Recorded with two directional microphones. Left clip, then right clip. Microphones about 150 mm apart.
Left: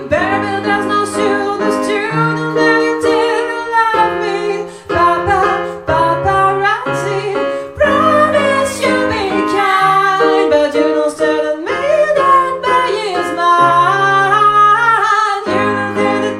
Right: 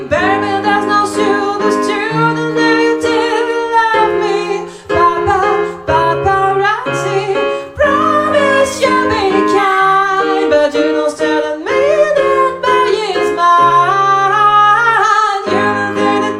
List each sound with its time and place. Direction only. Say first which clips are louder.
0.7 s music: right 2 dB; 50° right (ahead or behind)
2.6 s music: even; 50° right (ahead or behind)
5.9 s music: even; 50° right (ahead or behind)
9.5 s music: left 1 dB; 50° right (ahead or behind)
13.4 s music: right 1 dB; 50° right (ahead or behind)